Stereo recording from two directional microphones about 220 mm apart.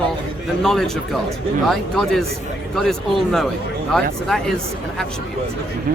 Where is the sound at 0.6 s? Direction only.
Centre (ahead or behind).